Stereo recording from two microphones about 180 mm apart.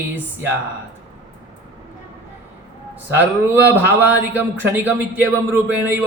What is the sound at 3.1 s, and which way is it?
Speech, 10° right (ahead or behind).